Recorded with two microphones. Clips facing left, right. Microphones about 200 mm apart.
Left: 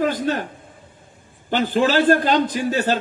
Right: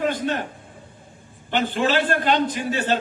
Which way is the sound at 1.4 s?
40° left (ahead or behind).